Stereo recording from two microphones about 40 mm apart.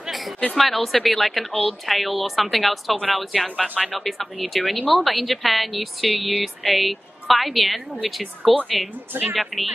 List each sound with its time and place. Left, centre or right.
0.6 s speech: centre
3.6 s speech: left
3.9 s speech: centre